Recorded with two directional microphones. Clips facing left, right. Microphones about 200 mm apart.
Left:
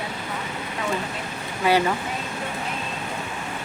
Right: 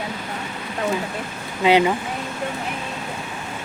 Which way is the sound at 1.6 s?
20° right (ahead or behind).